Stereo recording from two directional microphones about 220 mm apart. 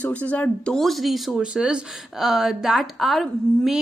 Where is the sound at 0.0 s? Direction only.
5° left (ahead or behind).